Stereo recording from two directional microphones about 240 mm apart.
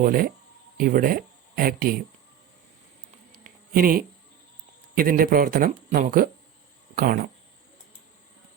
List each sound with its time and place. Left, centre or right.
0.0 s speech: right
3.8 s speech: right